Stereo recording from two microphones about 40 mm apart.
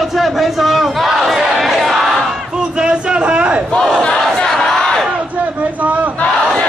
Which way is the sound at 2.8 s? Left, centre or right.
Right.